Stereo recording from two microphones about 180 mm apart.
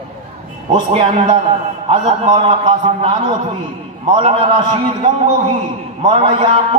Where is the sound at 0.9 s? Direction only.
35° right (ahead or behind).